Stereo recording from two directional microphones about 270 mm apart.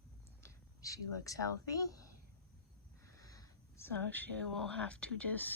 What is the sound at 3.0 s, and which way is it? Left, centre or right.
Speech, centre.